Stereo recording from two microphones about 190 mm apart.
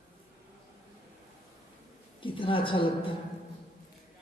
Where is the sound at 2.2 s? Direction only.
25° left (ahead or behind).